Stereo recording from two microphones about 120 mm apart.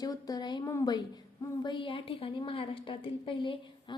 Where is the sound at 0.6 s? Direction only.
25° left (ahead or behind).